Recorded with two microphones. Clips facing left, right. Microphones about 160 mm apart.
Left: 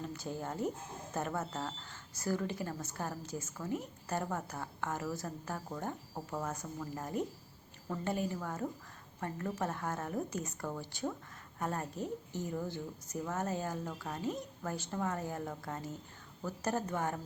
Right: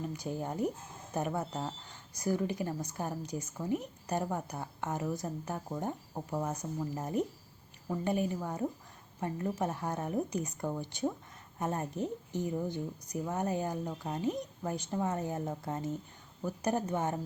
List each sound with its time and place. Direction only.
0.1 s a woman's voice: 15° right (ahead or behind)